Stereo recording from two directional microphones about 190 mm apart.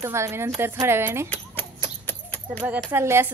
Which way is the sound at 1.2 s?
10° left (ahead or behind).